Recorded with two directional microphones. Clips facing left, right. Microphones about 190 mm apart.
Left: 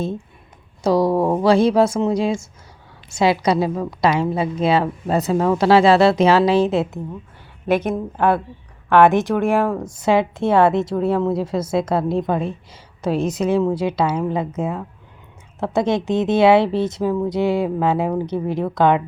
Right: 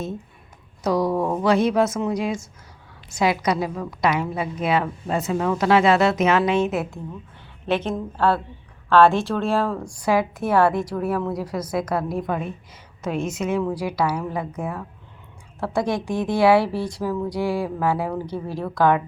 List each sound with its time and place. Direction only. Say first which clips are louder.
0.8 s a woman's voice: left 4 dB; 30° left (ahead or behind)
7.7 s a woman's voice: left 4 dB; 10° left (ahead or behind)